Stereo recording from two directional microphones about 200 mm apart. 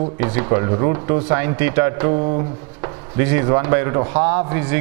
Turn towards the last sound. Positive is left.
turn(degrees=-10)  # may be behind; listen again after turning